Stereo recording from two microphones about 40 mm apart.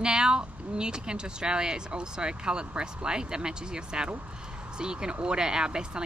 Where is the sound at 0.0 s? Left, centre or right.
Right.